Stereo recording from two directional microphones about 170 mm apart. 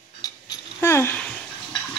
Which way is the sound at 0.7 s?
15° left (ahead or behind).